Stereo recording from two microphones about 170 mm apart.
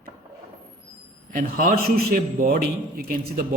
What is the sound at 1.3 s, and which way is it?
A man's voice, 55° right (ahead or behind).